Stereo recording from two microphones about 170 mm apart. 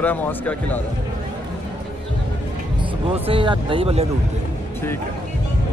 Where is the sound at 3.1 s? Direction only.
35° right (ahead or behind).